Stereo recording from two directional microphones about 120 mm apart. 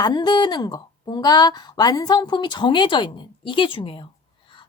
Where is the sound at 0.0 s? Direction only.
35° left (ahead or behind).